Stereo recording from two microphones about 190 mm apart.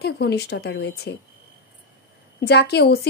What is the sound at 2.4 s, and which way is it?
Speech, 60° left (ahead or behind).